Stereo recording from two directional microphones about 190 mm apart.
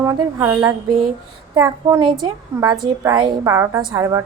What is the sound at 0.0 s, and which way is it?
A woman's voice, 15° right (ahead or behind).